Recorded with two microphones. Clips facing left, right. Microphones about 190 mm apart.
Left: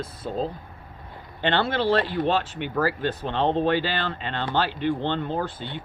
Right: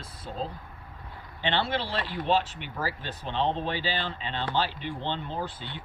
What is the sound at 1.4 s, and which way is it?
Speech, 50° left (ahead or behind).